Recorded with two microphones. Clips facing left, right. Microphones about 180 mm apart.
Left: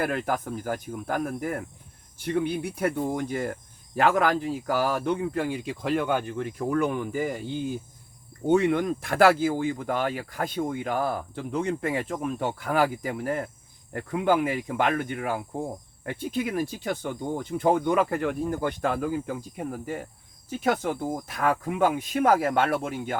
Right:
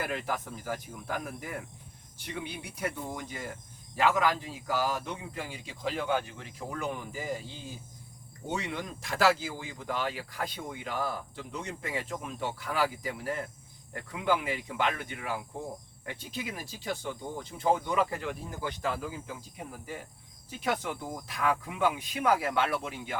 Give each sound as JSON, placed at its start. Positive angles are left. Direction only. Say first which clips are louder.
{"t": 0.0, "sound": "speech", "louder": "left 7 dB", "side_deg": 55}